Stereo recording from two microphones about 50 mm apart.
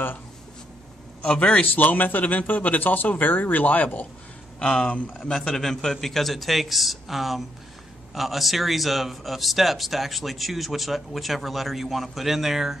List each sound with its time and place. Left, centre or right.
1.2 s a man's voice: left
4.6 s speech: centre
5.2 s speech: centre